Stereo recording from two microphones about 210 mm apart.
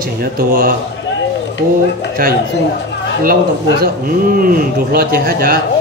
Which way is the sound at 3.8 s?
40° right (ahead or behind).